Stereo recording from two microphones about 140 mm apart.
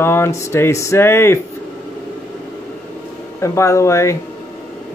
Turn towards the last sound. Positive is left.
turn(degrees=20)  # may be behind; listen again after turning